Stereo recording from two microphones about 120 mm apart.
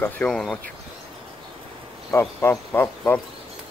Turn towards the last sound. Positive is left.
turn(degrees=15)  # may be behind; listen again after turning